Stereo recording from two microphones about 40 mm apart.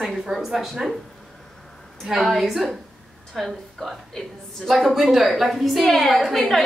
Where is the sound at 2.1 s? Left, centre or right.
Centre.